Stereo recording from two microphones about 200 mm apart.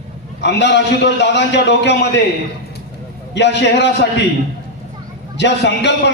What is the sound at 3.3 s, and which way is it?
Speech, 60° left (ahead or behind).